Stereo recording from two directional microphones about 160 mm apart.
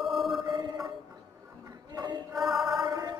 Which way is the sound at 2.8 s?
25° right (ahead or behind).